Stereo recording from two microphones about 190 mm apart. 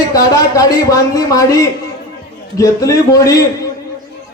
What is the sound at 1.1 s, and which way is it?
A man's voice, 15° left (ahead or behind).